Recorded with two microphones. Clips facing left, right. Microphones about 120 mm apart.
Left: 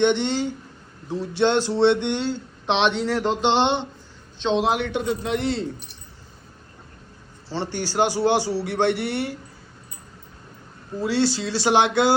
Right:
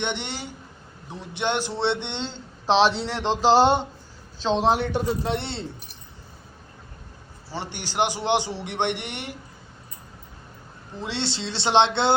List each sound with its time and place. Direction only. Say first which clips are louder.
0.0 s speech: left 10 dB; 15° right (ahead or behind); by 5.6 s 30° right (ahead or behind)
7.5 s a man's voice: left 4 dB; 15° right (ahead or behind)
11.0 s a man's voice: left 8 dB; 25° right (ahead or behind)